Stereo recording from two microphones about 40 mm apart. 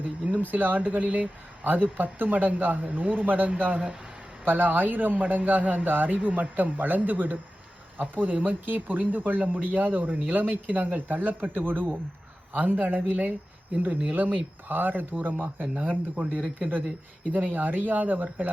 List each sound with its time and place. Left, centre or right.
0.3 s speech: right